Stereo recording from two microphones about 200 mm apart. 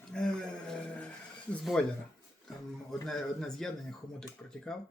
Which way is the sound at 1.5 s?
5° left (ahead or behind).